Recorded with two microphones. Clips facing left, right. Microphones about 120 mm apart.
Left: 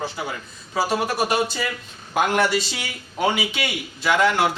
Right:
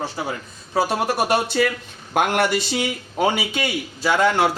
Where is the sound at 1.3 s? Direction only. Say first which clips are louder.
Right 4 dB; 55° right (ahead or behind).